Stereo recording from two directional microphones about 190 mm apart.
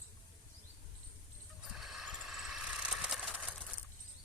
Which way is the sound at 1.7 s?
Centre (ahead or behind).